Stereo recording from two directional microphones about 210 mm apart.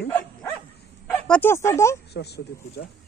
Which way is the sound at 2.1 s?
50° left (ahead or behind).